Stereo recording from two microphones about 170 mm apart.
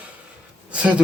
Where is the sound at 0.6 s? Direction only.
5° right (ahead or behind).